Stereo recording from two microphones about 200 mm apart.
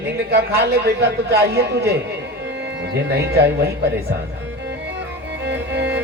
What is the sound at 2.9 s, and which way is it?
Speech, 55° right (ahead or behind).